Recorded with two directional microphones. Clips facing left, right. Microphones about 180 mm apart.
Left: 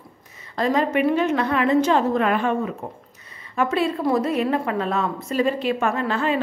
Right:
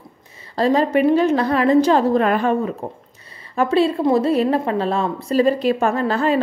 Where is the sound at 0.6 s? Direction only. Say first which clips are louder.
Right 4 dB; 35° right (ahead or behind).